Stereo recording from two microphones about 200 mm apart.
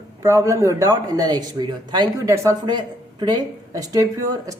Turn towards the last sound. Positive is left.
turn(degrees=-15)  # may be behind; listen again after turning